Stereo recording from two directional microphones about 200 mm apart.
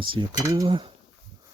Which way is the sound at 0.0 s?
25° right (ahead or behind).